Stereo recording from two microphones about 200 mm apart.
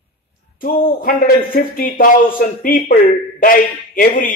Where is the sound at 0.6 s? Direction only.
45° left (ahead or behind).